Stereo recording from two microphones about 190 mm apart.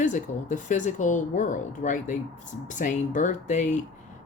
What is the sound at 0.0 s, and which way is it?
Speech, 40° left (ahead or behind).